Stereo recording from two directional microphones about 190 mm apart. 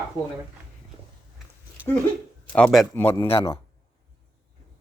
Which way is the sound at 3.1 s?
30° left (ahead or behind).